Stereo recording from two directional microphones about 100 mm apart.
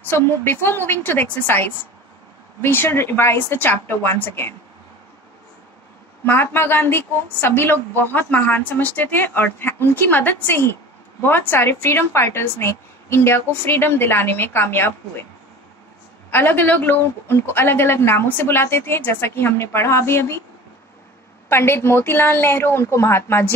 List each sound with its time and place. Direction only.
0.0 s a woman's voice: 20° left (ahead or behind)
6.2 s a woman's voice: 20° left (ahead or behind)
16.3 s a woman's voice: 20° left (ahead or behind)
21.5 s a woman's voice: 25° left (ahead or behind)